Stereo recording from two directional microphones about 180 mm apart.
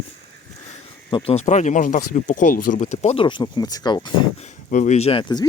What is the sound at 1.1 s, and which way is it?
Speech, 35° left (ahead or behind).